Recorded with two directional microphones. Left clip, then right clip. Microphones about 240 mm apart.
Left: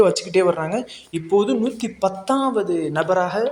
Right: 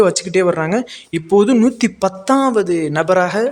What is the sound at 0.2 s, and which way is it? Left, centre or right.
Speech, centre.